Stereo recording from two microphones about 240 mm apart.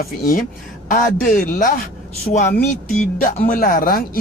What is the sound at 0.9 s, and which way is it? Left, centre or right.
Speech, left.